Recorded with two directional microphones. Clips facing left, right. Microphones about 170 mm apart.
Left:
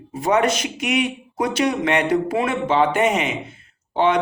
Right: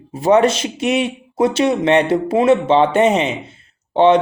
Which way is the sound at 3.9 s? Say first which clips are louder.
Right 7 dB; 25° right (ahead or behind).